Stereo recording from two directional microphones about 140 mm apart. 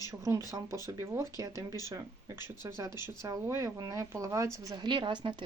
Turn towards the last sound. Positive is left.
turn(degrees=-35)  # may be behind; listen again after turning